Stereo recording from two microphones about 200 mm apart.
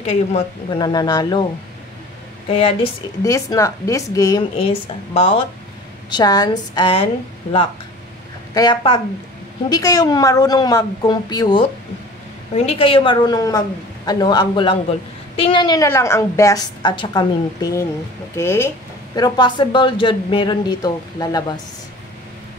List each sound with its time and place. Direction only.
0.0 s a woman's voice: 30° left (ahead or behind)
3.3 s a woman's voice: 15° left (ahead or behind)
4.6 s a woman's voice: 30° left (ahead or behind)
8.5 s a woman's voice: 25° left (ahead or behind)